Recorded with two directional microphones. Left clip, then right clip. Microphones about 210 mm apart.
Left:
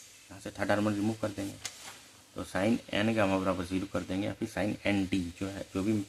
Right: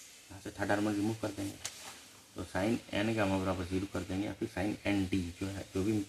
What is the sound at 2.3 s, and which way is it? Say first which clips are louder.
A man's voice: left 3 dB; 45° left (ahead or behind).